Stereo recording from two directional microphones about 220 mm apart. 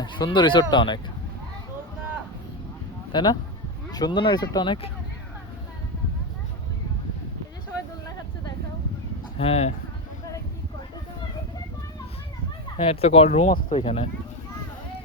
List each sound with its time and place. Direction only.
0.0 s speech: 20° left (ahead or behind)
3.1 s speech: 20° left (ahead or behind)
9.4 s speech: 30° left (ahead or behind)
12.7 s speech: 25° left (ahead or behind)